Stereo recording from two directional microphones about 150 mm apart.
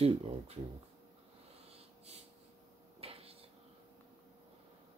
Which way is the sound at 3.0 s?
40° right (ahead or behind).